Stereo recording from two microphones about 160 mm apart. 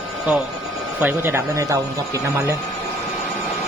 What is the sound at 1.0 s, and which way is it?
Speech, 15° right (ahead or behind).